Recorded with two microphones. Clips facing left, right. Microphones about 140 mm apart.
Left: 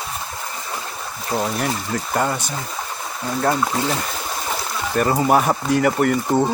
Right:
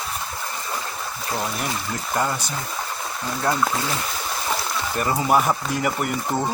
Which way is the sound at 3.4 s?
30° left (ahead or behind).